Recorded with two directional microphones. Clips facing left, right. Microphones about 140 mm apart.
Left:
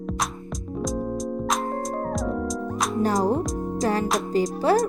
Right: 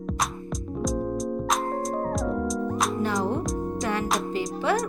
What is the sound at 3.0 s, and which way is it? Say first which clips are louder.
Music: left 4 dB; 40° left (ahead or behind).